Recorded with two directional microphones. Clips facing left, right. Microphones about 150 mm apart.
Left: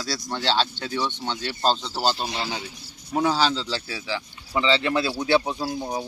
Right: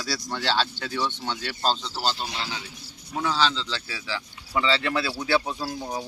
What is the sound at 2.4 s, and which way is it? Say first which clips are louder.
Speech: left 4 dB; 40° left (ahead or behind).